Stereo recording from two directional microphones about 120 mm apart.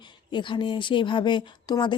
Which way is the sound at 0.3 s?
40° left (ahead or behind).